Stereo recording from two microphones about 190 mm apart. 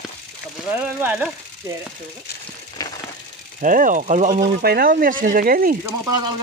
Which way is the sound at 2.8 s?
20° left (ahead or behind).